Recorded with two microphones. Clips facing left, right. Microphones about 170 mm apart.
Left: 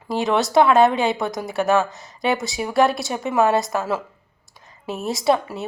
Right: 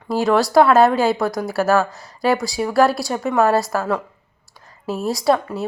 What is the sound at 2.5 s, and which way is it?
A woman's voice, centre (ahead or behind).